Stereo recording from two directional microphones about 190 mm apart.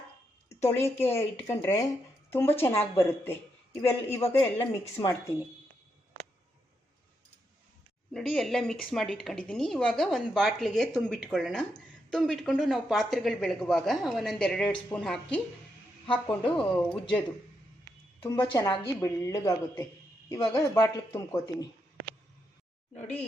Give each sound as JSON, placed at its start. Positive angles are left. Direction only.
{"t": 0.6, "sound": "a woman's voice", "side_deg": 15}
{"t": 8.1, "sound": "a woman's voice", "side_deg": 5}
{"t": 18.2, "sound": "a woman's voice", "side_deg": 25}